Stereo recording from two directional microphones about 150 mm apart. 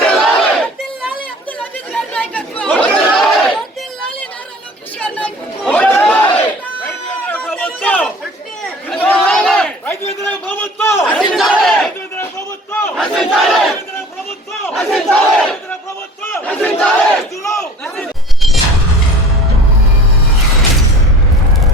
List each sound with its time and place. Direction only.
0.0 s battle cry: 5° left (ahead or behind)
1.5 s chatter: 5° left (ahead or behind)
4.9 s a sound: 10° left (ahead or behind)
5.7 s chatter: 10° left (ahead or behind)
7.3 s a sound: 10° left (ahead or behind)
8.9 s chatter: 10° left (ahead or behind)
10.2 s a sound: 10° left (ahead or behind)
11.2 s crowd: centre (ahead or behind)
11.5 s battle cry: 5° left (ahead or behind)
14.8 s battle cry: centre (ahead or behind)
16.2 s battle cry: 15° left (ahead or behind)
17.4 s battle cry: 20° left (ahead or behind)
17.9 s a sound: centre (ahead or behind)